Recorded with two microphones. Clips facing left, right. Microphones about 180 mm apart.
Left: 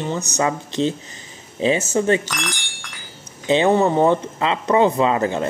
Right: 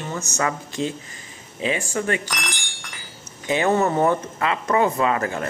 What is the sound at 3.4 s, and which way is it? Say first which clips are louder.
Speech: left 4 dB; 20° left (ahead or behind).